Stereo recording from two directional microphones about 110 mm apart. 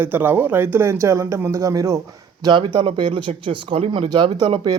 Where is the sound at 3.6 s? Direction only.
70° right (ahead or behind).